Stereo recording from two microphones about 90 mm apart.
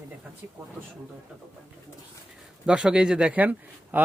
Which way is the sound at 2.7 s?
10° right (ahead or behind).